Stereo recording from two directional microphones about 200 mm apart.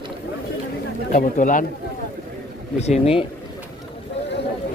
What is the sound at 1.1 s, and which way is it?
Speech, 40° left (ahead or behind).